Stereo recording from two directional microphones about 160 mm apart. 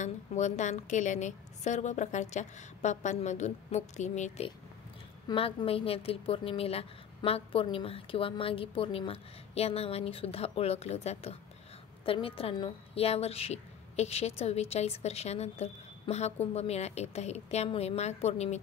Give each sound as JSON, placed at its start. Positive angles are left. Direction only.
{"t": 0.0, "sound": "a woman's voice", "side_deg": 50}
{"t": 5.3, "sound": "a woman's voice", "side_deg": 35}